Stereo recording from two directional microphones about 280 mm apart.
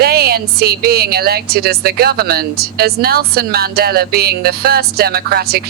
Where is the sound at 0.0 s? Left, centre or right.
Right.